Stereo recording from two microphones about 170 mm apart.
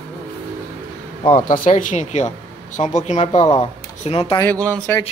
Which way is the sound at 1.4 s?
50° left (ahead or behind).